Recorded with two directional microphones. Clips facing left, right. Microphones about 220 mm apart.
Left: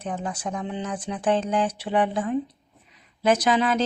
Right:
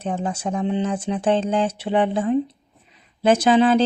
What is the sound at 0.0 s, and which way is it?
Speech, 25° right (ahead or behind).